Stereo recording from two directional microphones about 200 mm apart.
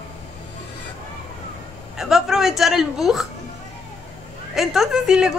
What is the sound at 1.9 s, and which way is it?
A woman's voice, centre (ahead or behind).